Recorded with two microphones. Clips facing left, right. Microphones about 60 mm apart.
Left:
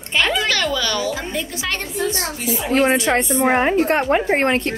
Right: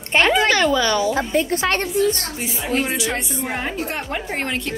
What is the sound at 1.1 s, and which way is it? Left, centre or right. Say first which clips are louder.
Speech: right 6 dB; right.